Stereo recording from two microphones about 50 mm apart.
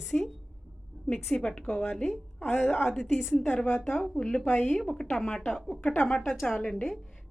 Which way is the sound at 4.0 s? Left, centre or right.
Centre.